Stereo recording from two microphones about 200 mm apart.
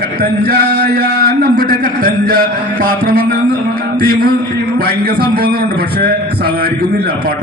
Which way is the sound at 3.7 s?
50° right (ahead or behind).